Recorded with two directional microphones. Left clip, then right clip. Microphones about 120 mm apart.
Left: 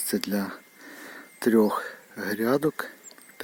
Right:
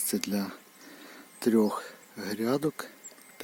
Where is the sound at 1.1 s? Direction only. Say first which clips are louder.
Left 4 dB; 5° left (ahead or behind).